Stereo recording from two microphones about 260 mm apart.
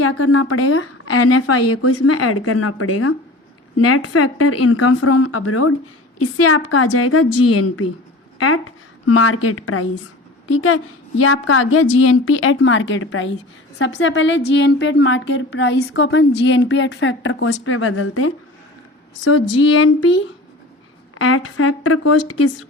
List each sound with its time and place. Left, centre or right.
0.0 s a woman's voice: left
21.2 s speech: left